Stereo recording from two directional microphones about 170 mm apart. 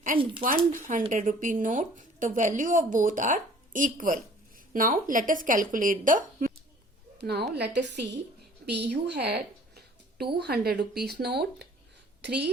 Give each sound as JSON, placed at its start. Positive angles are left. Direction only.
{"t": 0.4, "sound": "a woman's voice", "side_deg": -50}
{"t": 7.2, "sound": "a woman's voice", "side_deg": -70}
{"t": 8.6, "sound": "a sound", "side_deg": -80}
{"t": 10.3, "sound": "a woman's voice", "side_deg": -70}